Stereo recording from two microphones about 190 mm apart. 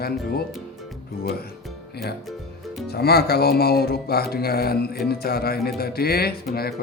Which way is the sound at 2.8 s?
55° left (ahead or behind).